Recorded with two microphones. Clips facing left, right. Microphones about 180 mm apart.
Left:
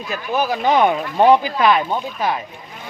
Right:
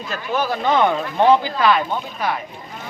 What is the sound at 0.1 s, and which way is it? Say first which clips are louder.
Speech: left 2 dB; 15° left (ahead or behind).